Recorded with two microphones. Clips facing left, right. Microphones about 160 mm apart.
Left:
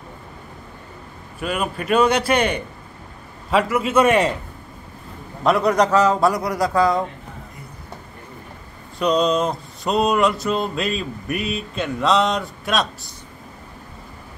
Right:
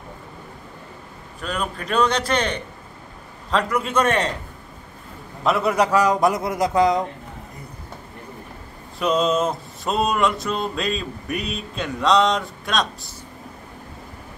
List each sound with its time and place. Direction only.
1.4 s a man's voice: 10° left (ahead or behind)
5.4 s a man's voice: centre (ahead or behind); by 7.1 s 20° right (ahead or behind)
8.9 s a sound: centre (ahead or behind)